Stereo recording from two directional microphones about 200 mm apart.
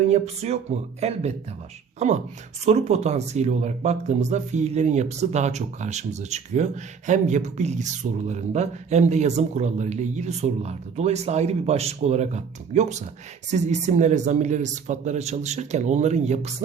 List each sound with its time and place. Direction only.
0.1 s speech: 30° right (ahead or behind)